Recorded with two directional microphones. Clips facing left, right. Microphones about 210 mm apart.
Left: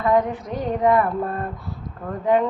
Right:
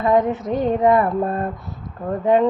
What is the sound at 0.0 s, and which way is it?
Female singing, 25° right (ahead or behind).